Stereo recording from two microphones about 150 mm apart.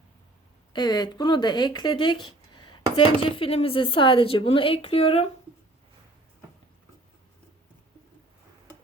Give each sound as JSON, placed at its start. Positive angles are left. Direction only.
{"t": 0.7, "sound": "speech", "side_deg": 30}